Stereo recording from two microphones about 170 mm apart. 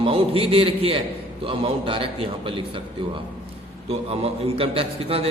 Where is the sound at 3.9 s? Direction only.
35° right (ahead or behind).